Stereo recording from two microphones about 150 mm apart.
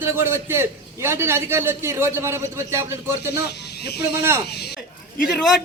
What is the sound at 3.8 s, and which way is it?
Speech, 90° left.